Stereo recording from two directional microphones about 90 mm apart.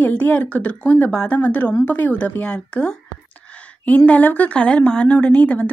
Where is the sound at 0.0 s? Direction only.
20° left (ahead or behind).